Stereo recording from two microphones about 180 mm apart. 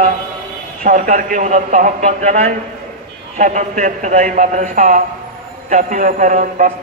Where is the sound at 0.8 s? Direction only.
45° right (ahead or behind).